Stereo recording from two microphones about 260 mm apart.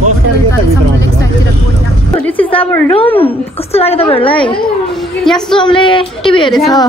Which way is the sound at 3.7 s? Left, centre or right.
Left.